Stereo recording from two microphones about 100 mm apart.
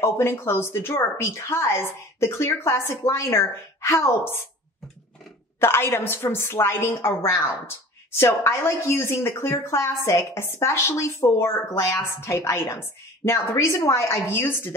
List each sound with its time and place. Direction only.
0.0 s a woman's voice: 25° left (ahead or behind)
5.6 s a woman's voice: 25° left (ahead or behind)